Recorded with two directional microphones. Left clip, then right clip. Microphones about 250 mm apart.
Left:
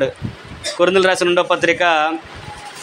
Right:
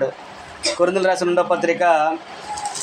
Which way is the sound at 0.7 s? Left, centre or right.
Left.